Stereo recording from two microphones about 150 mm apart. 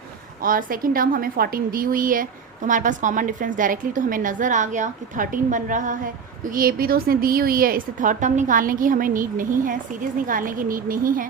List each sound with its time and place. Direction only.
0.4 s a woman's voice: 70° right (ahead or behind)